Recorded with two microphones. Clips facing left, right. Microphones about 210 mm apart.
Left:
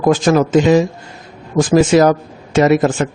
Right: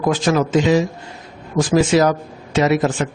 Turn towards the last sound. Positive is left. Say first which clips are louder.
# left 4 dB
turn(degrees=45)  # may be behind; listen again after turning